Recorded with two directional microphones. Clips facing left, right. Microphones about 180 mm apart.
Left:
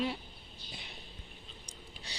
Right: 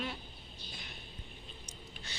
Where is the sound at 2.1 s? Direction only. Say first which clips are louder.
Left 2 dB; 35° left (ahead or behind).